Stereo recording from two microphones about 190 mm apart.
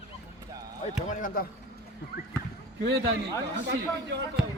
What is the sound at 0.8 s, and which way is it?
Speech, 40° left (ahead or behind).